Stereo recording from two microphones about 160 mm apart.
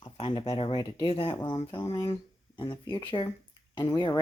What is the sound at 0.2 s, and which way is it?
Speech, 35° left (ahead or behind).